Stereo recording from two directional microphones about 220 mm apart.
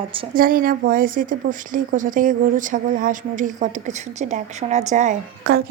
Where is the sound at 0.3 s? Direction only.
40° right (ahead or behind).